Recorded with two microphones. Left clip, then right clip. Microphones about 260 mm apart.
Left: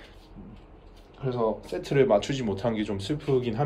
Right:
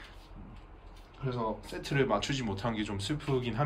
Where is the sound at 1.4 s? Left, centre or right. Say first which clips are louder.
Left 9 dB; centre.